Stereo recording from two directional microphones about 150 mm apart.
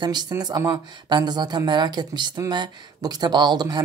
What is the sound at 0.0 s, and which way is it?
Speech, 30° right (ahead or behind).